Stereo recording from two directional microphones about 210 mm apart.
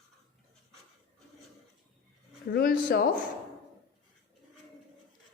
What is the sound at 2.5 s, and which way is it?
Speech, 45° left (ahead or behind).